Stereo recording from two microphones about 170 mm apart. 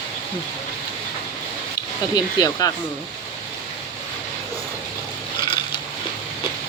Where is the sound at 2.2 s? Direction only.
25° left (ahead or behind).